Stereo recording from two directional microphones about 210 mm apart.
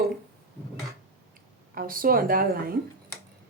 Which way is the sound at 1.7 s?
40° right (ahead or behind).